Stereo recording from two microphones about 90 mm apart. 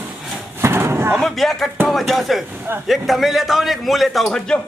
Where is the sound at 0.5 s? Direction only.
25° right (ahead or behind).